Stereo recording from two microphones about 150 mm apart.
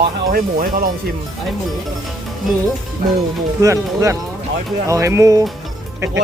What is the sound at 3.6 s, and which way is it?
Speech, 20° right (ahead or behind).